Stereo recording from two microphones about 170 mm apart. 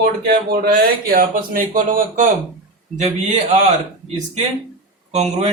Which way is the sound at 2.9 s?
40° right (ahead or behind).